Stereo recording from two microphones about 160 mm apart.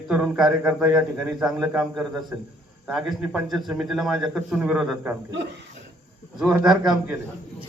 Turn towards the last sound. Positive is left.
turn(degrees=-5)  # may be behind; listen again after turning